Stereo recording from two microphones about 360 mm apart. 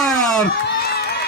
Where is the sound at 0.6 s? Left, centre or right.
Left.